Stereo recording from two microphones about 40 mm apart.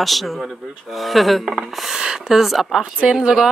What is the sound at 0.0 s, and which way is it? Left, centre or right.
Speech, centre.